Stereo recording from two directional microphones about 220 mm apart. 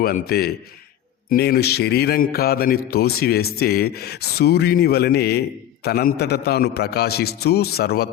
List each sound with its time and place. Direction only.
0.0 s a man's voice: 45° left (ahead or behind)